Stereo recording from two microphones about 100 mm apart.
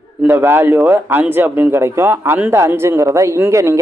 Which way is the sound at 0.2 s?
20° right (ahead or behind).